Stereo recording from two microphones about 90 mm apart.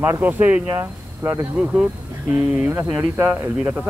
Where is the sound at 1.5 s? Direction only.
10° right (ahead or behind).